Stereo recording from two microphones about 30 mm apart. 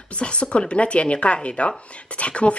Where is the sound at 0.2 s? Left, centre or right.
Left.